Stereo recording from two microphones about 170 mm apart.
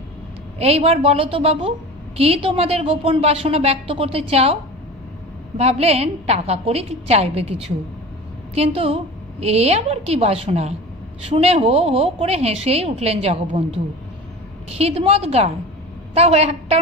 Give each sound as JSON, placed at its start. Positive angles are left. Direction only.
{"t": 0.6, "sound": "a woman's voice", "side_deg": -35}
{"t": 5.6, "sound": "a woman's voice", "side_deg": -35}